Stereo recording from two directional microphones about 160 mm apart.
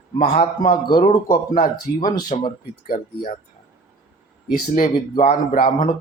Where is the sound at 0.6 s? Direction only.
65° left (ahead or behind).